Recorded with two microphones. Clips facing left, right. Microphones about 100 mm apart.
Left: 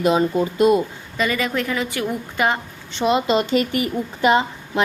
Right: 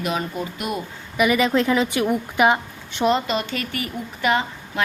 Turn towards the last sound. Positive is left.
turn(degrees=25)  # may be behind; listen again after turning